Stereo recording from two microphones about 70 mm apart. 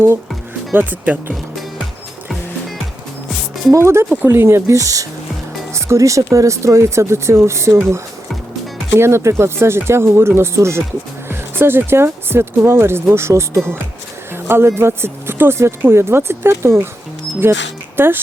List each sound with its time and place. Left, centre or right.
0.7 s speech: right
3.7 s speech: right
4.1 s speech: right
14.3 s music: right
14.8 s speech: right